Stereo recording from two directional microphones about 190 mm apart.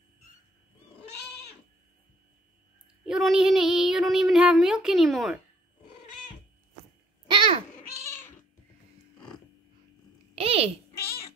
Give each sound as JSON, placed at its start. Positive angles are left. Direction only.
{"t": 3.1, "sound": "speech", "side_deg": 0}
{"t": 7.2, "sound": "babbling", "side_deg": -25}
{"t": 10.3, "sound": "a sound", "side_deg": -30}